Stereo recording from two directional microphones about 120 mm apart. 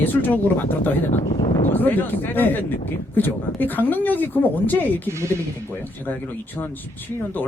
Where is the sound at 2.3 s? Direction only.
15° left (ahead or behind).